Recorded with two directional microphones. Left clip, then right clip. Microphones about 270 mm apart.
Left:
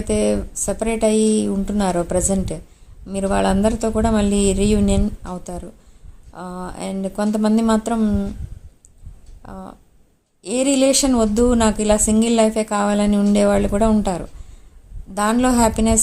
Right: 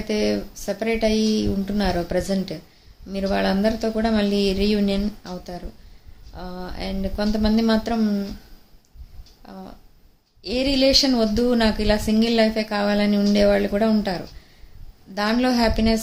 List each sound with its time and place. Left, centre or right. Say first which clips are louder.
0.1 s a woman's voice: left 4 dB; centre
9.4 s a woman's voice: left 4 dB; centre